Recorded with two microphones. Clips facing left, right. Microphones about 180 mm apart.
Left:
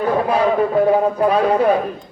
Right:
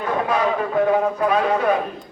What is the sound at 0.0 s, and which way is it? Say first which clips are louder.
A man's voice: left 4 dB; 35° left (ahead or behind).